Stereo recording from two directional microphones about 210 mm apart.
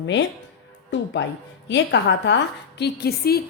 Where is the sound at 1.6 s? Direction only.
55° left (ahead or behind).